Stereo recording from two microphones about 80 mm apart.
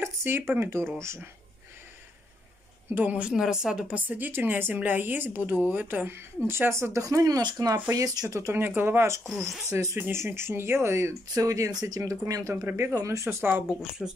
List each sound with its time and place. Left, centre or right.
0.0 s a sound: right
0.6 s speech: right
2.9 s a woman's voice: right
3.2 s speech: centre; by 8.5 s right
8.5 s speech: right
14.0 s speech: centre